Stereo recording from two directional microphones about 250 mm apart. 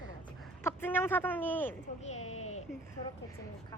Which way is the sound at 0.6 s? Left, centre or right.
Centre.